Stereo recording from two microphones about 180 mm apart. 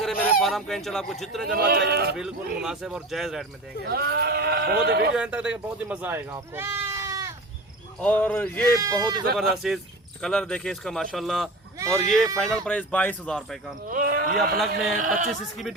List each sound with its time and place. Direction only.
0.0 s speech: centre (ahead or behind)
1.5 s speech: 60° right (ahead or behind)
2.1 s speech: 5° right (ahead or behind)
3.8 s speech: 60° right (ahead or behind)
5.1 s speech: 5° right (ahead or behind)
8.0 s speech: 10° left (ahead or behind)
8.6 s speech: 20° right (ahead or behind)
9.3 s speech: centre (ahead or behind)
11.8 s speech: 15° right (ahead or behind)
12.0 s speech: centre (ahead or behind)
13.8 s speech: 50° right (ahead or behind)
15.3 s speech: centre (ahead or behind)